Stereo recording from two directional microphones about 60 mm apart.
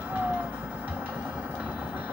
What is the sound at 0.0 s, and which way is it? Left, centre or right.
Music, right.